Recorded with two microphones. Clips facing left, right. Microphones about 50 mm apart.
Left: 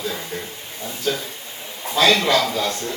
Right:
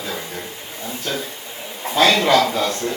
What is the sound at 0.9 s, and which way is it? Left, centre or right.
A man's voice, right.